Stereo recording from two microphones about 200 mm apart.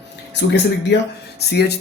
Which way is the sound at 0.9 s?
60° left (ahead or behind).